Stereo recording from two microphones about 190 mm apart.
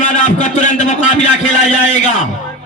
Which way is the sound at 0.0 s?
40° left (ahead or behind).